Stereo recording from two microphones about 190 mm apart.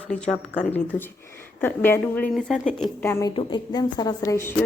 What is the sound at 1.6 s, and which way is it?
A woman's voice, 10° left (ahead or behind).